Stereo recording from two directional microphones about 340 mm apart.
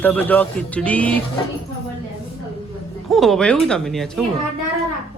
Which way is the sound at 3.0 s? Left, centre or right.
Centre.